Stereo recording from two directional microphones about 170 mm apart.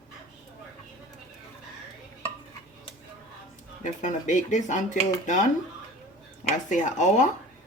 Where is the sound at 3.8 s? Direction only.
45° left (ahead or behind).